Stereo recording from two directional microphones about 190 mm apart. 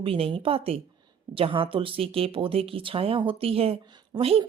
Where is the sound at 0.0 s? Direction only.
30° right (ahead or behind).